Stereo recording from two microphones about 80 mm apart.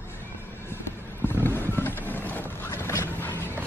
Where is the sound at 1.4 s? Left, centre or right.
Left.